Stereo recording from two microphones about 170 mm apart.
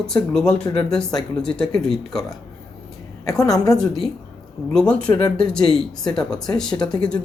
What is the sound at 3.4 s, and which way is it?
Speech, 20° left (ahead or behind).